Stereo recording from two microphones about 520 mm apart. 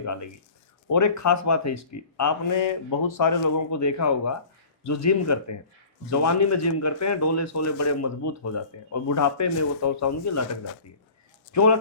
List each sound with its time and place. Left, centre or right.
0.0 s speech: left
11.5 s speech: left